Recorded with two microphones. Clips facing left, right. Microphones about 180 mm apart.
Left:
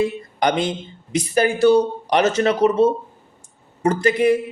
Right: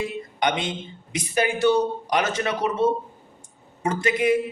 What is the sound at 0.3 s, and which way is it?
A man's voice, 35° left (ahead or behind).